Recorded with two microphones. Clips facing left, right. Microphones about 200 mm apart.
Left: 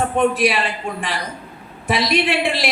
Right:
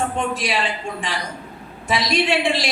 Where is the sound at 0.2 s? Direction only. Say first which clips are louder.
Left 6 dB; 60° left (ahead or behind).